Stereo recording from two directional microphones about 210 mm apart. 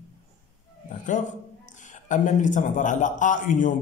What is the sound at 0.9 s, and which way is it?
A man's voice, 35° left (ahead or behind).